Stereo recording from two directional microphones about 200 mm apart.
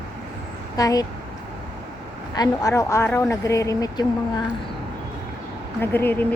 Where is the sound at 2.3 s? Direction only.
20° left (ahead or behind).